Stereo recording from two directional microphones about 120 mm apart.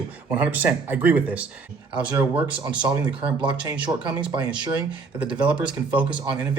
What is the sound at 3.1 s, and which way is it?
Speech, 45° right (ahead or behind).